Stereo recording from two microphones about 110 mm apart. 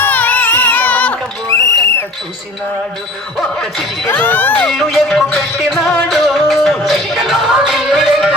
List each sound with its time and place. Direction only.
0.0 s music: 15° left (ahead or behind)
1.5 s owl: 30° left (ahead or behind)
3.3 s speech: centre (ahead or behind)
4.1 s music: 15° left (ahead or behind); by 8.4 s centre (ahead or behind)